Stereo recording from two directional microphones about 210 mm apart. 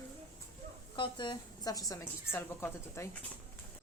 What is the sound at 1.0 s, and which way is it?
Speech, 20° left (ahead or behind).